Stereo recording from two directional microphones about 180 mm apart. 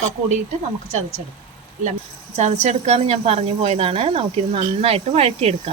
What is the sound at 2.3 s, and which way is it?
A woman's voice, 40° right (ahead or behind).